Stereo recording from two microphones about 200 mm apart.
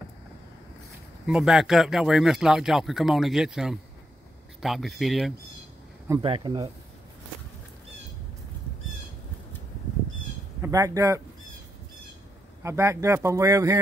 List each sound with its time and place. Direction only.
1.2 s speech: 5° right (ahead or behind)
6.2 s speech: 25° right (ahead or behind)
10.6 s speech: 15° right (ahead or behind)
12.6 s speech: 15° right (ahead or behind)